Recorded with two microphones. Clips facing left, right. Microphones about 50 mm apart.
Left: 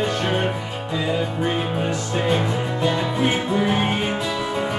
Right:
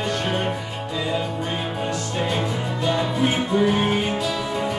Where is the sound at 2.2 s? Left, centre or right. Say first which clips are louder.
Left 4 dB; centre.